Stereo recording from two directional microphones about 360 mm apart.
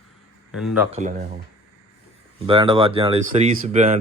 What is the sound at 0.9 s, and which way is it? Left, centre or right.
Speech, right.